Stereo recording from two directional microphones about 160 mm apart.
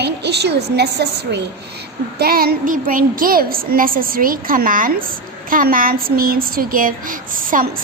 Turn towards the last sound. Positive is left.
turn(degrees=-60)  # may be behind; listen again after turning